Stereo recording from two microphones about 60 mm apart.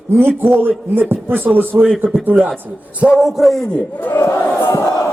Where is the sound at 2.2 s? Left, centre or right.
Right.